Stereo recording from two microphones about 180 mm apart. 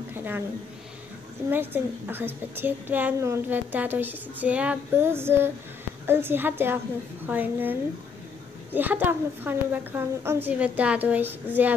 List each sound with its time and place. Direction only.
0.1 s a sound: 10° right (ahead or behind)
1.5 s a woman's voice: 10° right (ahead or behind)
8.7 s a woman's voice: 10° right (ahead or behind)